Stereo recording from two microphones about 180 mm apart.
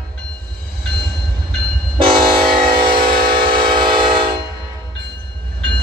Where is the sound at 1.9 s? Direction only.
30° right (ahead or behind).